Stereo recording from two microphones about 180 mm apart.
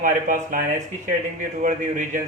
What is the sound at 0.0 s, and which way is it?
Speech, 45° right (ahead or behind).